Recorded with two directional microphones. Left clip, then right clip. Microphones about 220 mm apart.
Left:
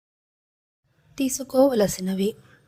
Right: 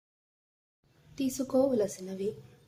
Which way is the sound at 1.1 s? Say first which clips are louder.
Left 7 dB; 35° left (ahead or behind).